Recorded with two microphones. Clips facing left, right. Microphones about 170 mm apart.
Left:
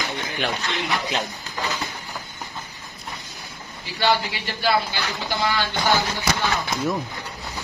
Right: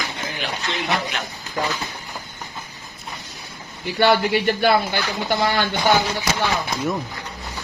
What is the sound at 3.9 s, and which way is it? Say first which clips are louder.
Speech: right 5 dB; 55° right (ahead or behind).